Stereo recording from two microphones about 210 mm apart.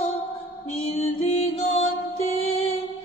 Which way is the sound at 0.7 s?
30° left (ahead or behind).